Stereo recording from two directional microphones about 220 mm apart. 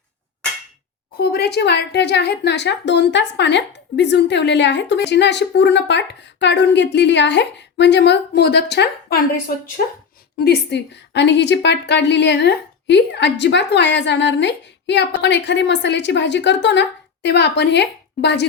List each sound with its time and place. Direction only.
1.1 s speech: 45° left (ahead or behind)
10.4 s speech: 50° left (ahead or behind)